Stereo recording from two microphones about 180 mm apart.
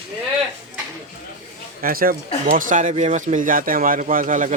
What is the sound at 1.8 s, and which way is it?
Speech, 55° right (ahead or behind).